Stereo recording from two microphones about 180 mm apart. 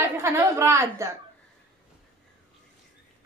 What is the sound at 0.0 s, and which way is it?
A woman's voice, 15° right (ahead or behind).